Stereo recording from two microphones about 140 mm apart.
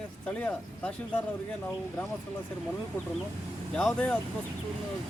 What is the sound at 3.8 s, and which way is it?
Speech, 10° left (ahead or behind).